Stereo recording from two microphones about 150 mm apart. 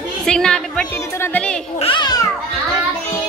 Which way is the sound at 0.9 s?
15° left (ahead or behind).